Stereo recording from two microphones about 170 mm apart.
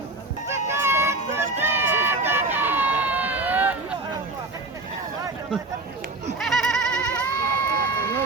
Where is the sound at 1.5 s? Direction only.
15° right (ahead or behind).